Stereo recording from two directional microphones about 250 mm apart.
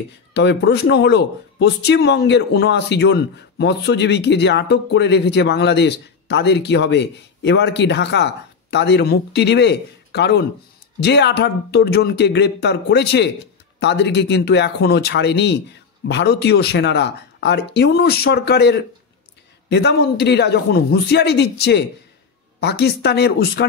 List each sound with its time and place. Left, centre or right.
0.3 s speech: left